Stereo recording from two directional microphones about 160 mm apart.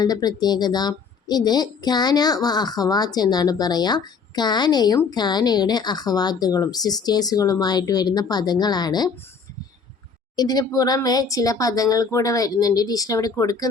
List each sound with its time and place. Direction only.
0.0 s a woman's voice: 25° left (ahead or behind)
10.3 s a woman's voice: 25° left (ahead or behind)